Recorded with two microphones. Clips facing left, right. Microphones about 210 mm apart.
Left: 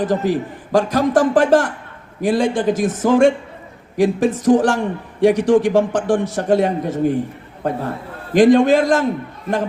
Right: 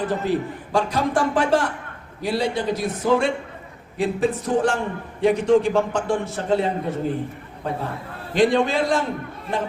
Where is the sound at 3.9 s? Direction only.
90° left.